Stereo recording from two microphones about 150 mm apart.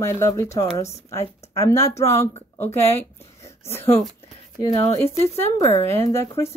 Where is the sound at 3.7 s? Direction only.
15° left (ahead or behind).